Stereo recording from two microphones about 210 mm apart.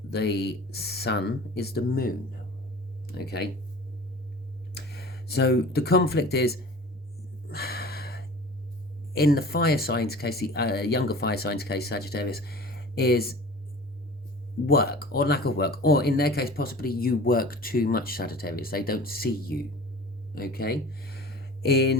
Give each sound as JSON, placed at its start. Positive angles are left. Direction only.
{"t": 0.1, "sound": "speech", "side_deg": 50}
{"t": 4.7, "sound": "speech", "side_deg": 50}
{"t": 7.4, "sound": "a sound", "side_deg": 45}
{"t": 9.1, "sound": "speech", "side_deg": 45}
{"t": 14.7, "sound": "speech", "side_deg": 45}